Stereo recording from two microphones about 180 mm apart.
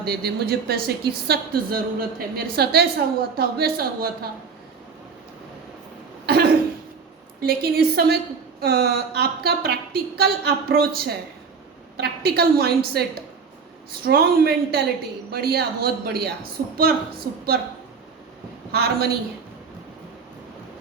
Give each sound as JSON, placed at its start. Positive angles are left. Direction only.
{"t": 0.0, "sound": "speech", "side_deg": -60}
{"t": 7.4, "sound": "speech", "side_deg": -60}
{"t": 18.7, "sound": "speech", "side_deg": -60}